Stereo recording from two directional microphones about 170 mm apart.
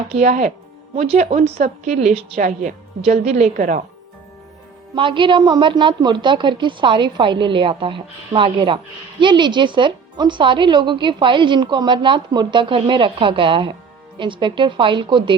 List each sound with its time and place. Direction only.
0.1 s a woman's voice: 45° right (ahead or behind)
4.9 s speech: 30° right (ahead or behind)